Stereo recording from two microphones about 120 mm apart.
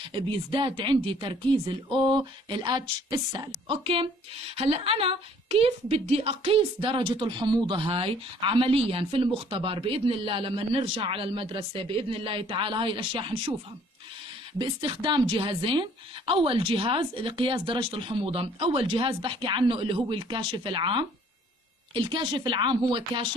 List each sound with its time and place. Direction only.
0.1 s a woman's voice: 45° right (ahead or behind)
14.6 s a woman's voice: 40° right (ahead or behind)